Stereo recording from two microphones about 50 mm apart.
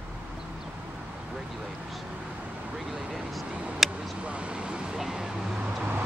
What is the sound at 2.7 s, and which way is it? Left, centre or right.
Vehicle, centre.